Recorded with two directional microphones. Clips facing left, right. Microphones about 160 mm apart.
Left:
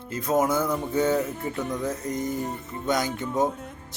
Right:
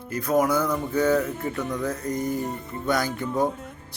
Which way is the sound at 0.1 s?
25° left (ahead or behind).